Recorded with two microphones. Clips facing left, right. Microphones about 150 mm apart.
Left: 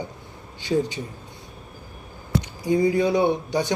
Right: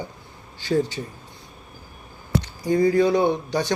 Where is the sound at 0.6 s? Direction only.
15° left (ahead or behind).